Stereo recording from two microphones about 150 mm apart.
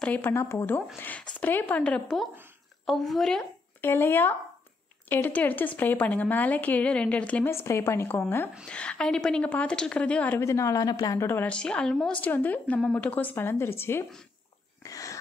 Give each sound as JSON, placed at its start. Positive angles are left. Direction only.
{"t": 0.0, "sound": "a woman's voice", "side_deg": 10}
{"t": 3.8, "sound": "a woman's voice", "side_deg": 15}
{"t": 14.8, "sound": "a sound", "side_deg": 20}